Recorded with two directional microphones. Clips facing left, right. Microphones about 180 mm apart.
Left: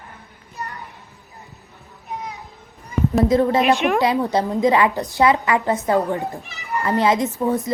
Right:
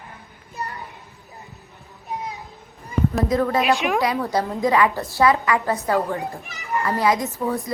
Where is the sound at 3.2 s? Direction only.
25° left (ahead or behind).